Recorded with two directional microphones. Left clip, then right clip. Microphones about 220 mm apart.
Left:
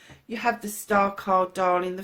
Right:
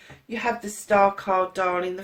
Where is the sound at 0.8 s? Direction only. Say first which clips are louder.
Right 3 dB; 45° left (ahead or behind).